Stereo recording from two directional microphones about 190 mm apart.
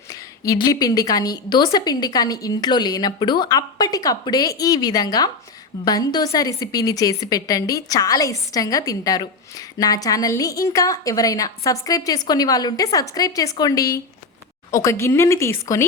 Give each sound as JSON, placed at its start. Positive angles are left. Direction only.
{"t": 0.1, "sound": "a woman's voice", "side_deg": 15}